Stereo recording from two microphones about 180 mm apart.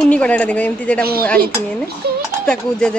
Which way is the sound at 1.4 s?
60° right (ahead or behind).